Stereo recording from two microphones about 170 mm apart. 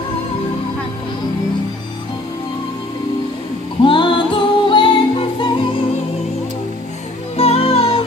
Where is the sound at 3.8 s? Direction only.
30° left (ahead or behind).